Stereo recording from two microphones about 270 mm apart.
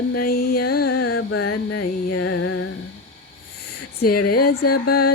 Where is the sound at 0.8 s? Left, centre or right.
Left.